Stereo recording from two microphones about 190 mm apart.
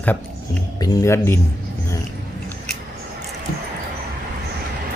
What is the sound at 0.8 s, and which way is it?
Speech, 20° left (ahead or behind).